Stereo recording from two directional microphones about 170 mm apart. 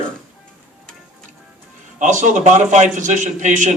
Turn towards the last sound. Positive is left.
turn(degrees=-45)  # may be behind; listen again after turning